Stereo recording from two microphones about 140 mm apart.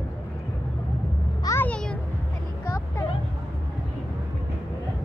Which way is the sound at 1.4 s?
15° left (ahead or behind).